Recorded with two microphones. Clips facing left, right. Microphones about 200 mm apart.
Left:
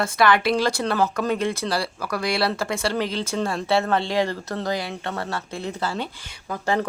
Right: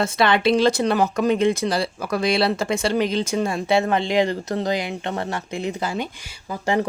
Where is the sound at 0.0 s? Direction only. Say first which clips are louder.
Right 1 dB; 25° right (ahead or behind).